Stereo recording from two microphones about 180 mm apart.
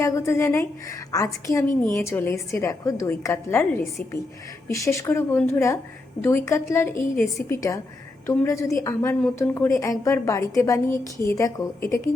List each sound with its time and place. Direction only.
0.0 s a woman's voice: 15° left (ahead or behind)